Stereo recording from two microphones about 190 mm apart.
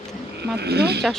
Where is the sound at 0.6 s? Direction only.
60° right (ahead or behind).